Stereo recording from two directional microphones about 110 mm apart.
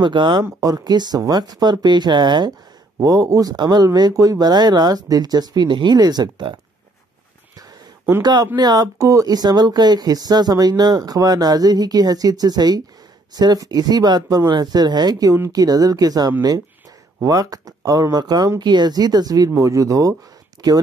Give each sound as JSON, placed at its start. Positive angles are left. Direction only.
{"t": 0.0, "sound": "speech", "side_deg": -45}
{"t": 0.6, "sound": "speech", "side_deg": -35}
{"t": 3.0, "sound": "speech", "side_deg": -35}
{"t": 8.2, "sound": "speech", "side_deg": -40}